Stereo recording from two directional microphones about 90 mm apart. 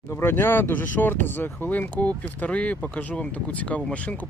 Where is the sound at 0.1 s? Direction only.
25° left (ahead or behind).